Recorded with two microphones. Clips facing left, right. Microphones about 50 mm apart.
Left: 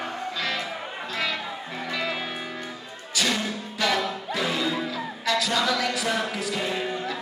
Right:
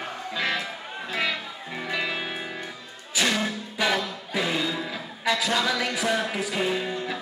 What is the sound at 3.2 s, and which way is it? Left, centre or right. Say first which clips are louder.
Music: right 1 dB; centre.